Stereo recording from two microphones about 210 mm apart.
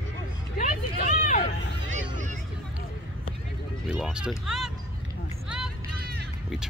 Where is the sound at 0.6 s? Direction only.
40° left (ahead or behind).